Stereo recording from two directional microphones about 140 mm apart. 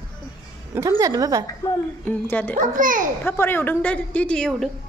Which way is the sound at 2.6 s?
70° right (ahead or behind).